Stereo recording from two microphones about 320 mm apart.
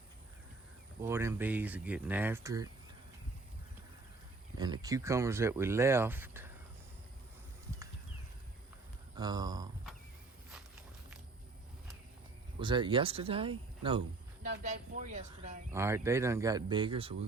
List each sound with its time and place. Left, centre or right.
1.0 s speech: centre
4.5 s speech: centre
9.1 s speech: centre
12.5 s speech: centre
15.7 s speech: centre